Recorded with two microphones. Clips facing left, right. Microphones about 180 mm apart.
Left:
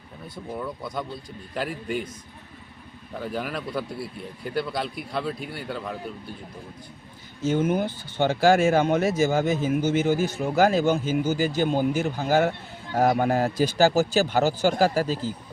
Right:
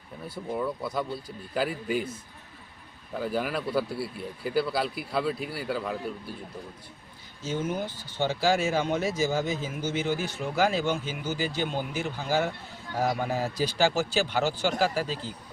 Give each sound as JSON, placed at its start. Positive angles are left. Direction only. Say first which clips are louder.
{"t": 0.3, "sound": "speech", "louder": "right 2 dB", "side_deg": -5}
{"t": 3.2, "sound": "speech", "louder": "right 1 dB", "side_deg": 0}
{"t": 7.4, "sound": "speech", "louder": "left 7 dB", "side_deg": 55}